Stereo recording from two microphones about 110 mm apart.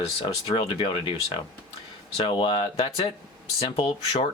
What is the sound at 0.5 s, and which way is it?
Speech, 55° left (ahead or behind).